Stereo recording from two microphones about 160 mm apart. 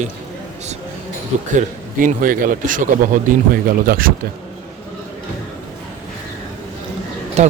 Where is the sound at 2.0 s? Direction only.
60° right (ahead or behind).